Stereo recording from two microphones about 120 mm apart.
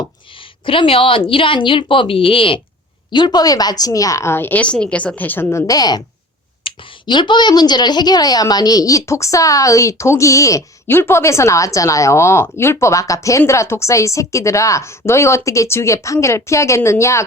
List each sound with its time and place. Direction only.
0.6 s a woman's voice: 45° left (ahead or behind); by 17.2 s 25° left (ahead or behind)